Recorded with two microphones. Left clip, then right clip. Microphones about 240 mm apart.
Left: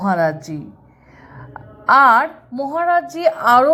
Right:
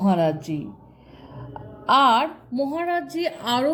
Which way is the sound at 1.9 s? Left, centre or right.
Left.